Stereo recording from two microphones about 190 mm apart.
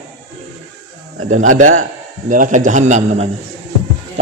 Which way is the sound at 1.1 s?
90° right.